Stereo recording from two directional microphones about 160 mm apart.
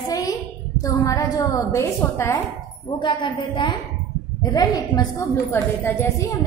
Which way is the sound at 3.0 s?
30° left (ahead or behind).